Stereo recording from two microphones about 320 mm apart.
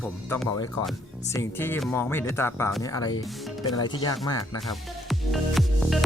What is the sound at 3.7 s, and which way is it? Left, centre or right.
Speech, centre.